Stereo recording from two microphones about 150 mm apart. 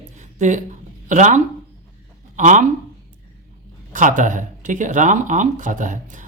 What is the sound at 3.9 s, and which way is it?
Speech, 55° right (ahead or behind).